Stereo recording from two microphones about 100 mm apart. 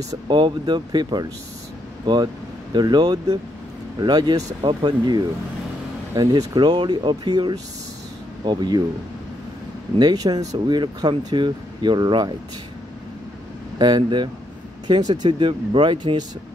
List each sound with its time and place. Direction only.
0.3 s speech: 50° right (ahead or behind)
9.9 s speech: 40° right (ahead or behind)
13.7 s speech: 45° right (ahead or behind)